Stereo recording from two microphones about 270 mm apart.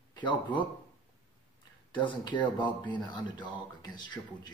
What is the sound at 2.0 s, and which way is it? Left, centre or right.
Speech, centre.